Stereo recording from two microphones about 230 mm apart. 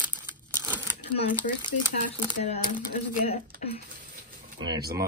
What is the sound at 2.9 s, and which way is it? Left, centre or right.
Speech, left.